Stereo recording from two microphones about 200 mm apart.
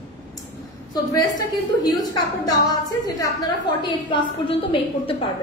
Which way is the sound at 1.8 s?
20° left (ahead or behind).